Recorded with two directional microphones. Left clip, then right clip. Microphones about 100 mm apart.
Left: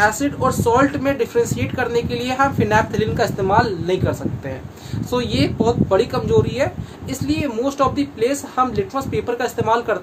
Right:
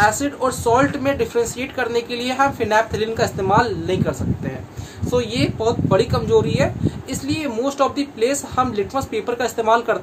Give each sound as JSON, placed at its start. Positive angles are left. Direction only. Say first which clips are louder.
{"t": 0.0, "sound": "speech", "louder": "even", "side_deg": 5}
{"t": 3.0, "sound": "speech", "louder": "left 1 dB", "side_deg": 25}
{"t": 5.9, "sound": "speech", "louder": "even", "side_deg": 5}